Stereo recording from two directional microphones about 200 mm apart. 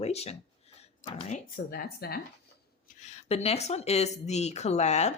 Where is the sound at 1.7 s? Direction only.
50° left (ahead or behind).